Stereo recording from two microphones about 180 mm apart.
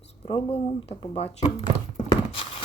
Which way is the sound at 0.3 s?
30° left (ahead or behind).